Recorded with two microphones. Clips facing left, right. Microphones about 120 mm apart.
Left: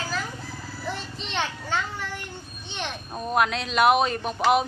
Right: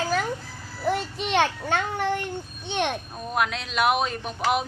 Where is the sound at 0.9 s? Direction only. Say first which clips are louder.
Right 9 dB; 60° right (ahead or behind).